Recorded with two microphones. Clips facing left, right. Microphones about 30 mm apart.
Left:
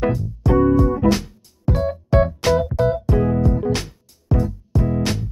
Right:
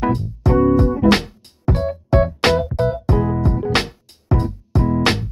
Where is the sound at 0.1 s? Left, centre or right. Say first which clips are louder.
Right 1 dB; right.